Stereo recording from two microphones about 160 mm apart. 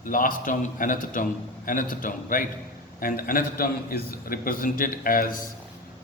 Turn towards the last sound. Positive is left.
turn(degrees=60)  # may be behind; listen again after turning